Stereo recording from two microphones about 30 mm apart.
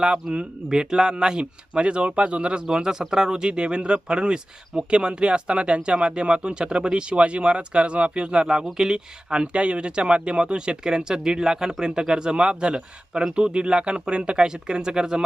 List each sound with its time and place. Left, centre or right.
0.3 s speech: right
0.7 s speech: right
1.7 s speech: right
2.7 s speech: right